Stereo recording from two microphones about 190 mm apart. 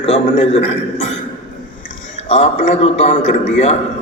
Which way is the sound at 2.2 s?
35° left (ahead or behind).